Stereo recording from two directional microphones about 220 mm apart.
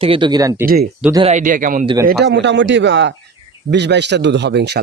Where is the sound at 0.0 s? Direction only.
25° right (ahead or behind).